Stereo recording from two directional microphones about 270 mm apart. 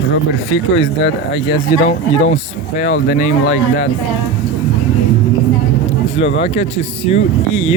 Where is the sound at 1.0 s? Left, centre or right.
Left.